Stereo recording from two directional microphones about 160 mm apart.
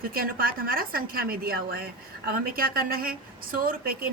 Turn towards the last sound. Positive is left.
turn(degrees=-65)  # may be behind; listen again after turning